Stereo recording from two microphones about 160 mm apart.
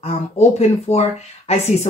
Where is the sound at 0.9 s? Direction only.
40° left (ahead or behind).